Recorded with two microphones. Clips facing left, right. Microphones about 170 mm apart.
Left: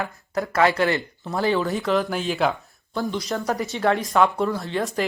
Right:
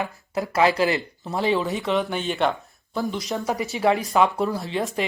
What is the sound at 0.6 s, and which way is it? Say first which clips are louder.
Speech: even; 30° right (ahead or behind).